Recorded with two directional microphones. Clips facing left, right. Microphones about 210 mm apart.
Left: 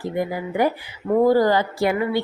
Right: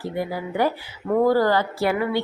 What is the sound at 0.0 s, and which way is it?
A woman's voice, 15° left (ahead or behind).